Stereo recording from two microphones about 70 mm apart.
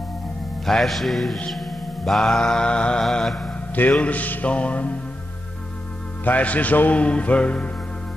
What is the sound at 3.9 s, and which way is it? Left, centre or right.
A man's voice, left.